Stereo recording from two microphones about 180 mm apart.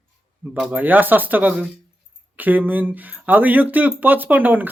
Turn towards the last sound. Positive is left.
turn(degrees=-10)  # may be behind; listen again after turning